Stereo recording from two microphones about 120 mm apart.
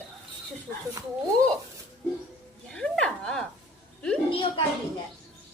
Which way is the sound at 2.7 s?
5° left (ahead or behind).